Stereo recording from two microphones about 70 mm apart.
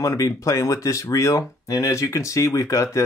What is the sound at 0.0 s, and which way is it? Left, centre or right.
Speech, left.